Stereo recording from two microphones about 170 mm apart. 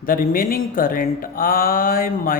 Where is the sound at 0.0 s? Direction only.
55° left (ahead or behind).